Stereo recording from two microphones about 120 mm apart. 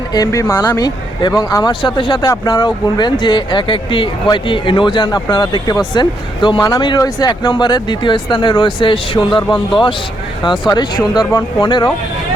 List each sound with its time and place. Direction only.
0.1 s speech: 30° left (ahead or behind)
6.6 s speech: 30° left (ahead or behind)
11.2 s speech: 35° left (ahead or behind)